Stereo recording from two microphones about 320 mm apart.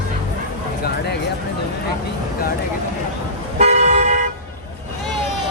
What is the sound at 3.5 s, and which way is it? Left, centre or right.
Car, right.